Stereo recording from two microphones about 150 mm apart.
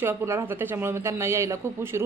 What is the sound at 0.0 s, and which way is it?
A woman's voice, 15° right (ahead or behind).